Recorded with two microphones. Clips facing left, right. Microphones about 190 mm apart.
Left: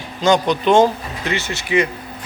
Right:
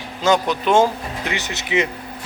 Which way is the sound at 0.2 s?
5° right (ahead or behind).